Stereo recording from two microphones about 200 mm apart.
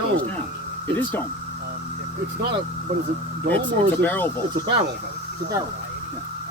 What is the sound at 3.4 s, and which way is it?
Speech, 10° left (ahead or behind).